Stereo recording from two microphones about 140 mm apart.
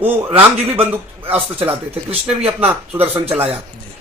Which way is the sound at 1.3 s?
10° right (ahead or behind).